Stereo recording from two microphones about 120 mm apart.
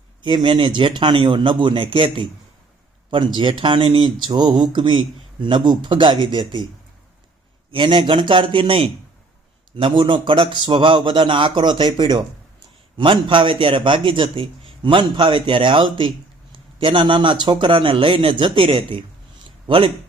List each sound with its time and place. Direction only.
0.2 s a man's voice: 40° right (ahead or behind)
3.6 s speech: 45° right (ahead or behind)
7.7 s a man's voice: 45° right (ahead or behind)